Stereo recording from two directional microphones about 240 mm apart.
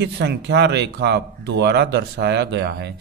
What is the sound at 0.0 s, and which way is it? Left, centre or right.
Speech, right.